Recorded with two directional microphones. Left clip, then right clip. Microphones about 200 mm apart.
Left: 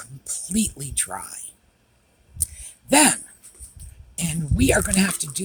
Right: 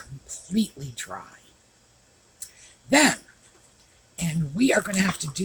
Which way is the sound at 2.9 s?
45° left (ahead or behind).